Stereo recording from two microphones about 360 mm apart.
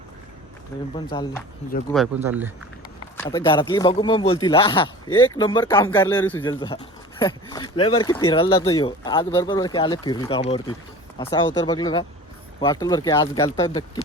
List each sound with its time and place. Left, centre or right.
0.9 s speech: centre
1.9 s speech: centre
3.2 s speech: centre